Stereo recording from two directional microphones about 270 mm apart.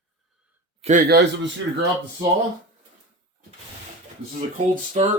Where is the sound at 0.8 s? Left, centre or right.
Right.